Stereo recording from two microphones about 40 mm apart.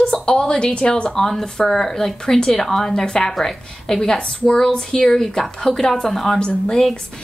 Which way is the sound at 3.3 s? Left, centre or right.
Centre.